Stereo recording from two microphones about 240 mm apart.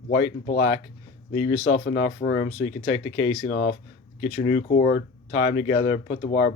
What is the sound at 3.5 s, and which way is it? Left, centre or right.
Speech, left.